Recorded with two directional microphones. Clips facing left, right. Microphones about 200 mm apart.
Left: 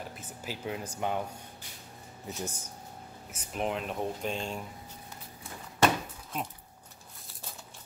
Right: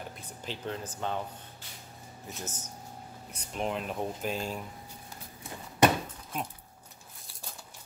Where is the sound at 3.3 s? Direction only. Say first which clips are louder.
Left 1 dB; 5° left (ahead or behind).